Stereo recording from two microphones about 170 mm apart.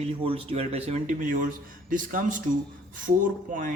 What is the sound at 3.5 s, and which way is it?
Speech, 50° right (ahead or behind).